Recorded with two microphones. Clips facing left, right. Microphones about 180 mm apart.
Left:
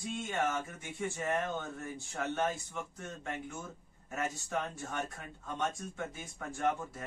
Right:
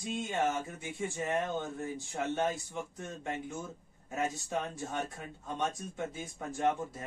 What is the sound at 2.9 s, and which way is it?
A man's voice, 15° right (ahead or behind).